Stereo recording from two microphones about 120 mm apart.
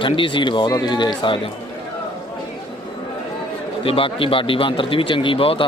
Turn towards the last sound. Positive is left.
turn(degrees=50)  # may be behind; listen again after turning